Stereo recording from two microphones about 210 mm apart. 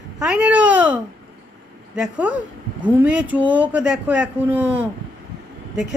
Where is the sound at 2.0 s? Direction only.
5° right (ahead or behind).